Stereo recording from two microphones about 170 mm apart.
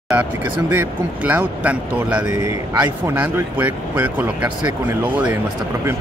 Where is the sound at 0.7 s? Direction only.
10° right (ahead or behind).